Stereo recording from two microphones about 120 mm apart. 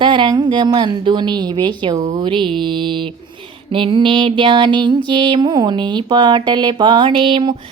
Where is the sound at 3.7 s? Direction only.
45° right (ahead or behind).